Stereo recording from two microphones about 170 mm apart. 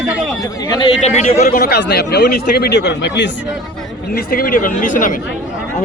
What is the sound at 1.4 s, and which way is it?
Speech, 65° left (ahead or behind).